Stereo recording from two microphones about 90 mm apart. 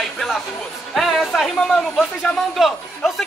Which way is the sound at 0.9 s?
5° left (ahead or behind).